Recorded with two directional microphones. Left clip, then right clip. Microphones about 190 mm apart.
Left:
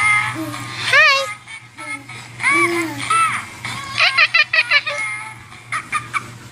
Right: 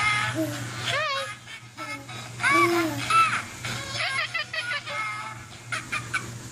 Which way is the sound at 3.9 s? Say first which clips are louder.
Left 15 dB; 10° left (ahead or behind).